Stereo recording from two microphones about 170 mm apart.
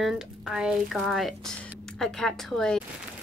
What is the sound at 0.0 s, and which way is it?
Speech, 5° right (ahead or behind).